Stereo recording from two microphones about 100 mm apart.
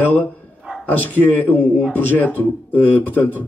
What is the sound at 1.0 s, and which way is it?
Speech, 20° left (ahead or behind).